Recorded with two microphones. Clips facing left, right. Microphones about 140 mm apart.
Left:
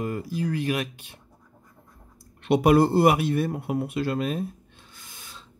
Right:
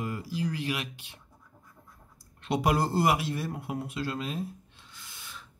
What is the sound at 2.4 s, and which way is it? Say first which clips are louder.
Speech: left 8 dB; 60° left (ahead or behind).